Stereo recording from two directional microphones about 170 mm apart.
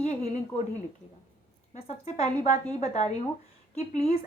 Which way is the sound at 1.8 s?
40° left (ahead or behind).